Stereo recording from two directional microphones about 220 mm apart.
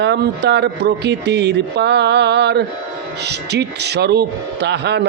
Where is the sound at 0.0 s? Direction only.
50° right (ahead or behind).